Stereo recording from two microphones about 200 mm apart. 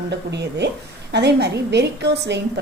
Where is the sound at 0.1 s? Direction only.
60° right (ahead or behind).